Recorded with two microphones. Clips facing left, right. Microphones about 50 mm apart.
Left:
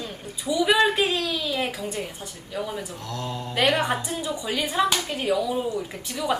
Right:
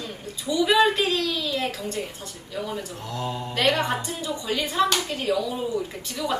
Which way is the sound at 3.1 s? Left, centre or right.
Centre.